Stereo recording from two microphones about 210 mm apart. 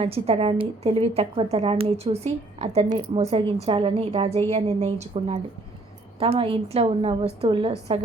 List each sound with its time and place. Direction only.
0.0 s a woman's voice: 30° right (ahead or behind)